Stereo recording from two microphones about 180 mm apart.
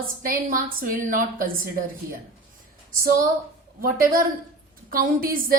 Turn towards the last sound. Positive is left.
turn(degrees=-50)  # may be behind; listen again after turning